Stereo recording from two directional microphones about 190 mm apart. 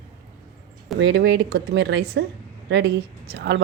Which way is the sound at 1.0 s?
70° right (ahead or behind).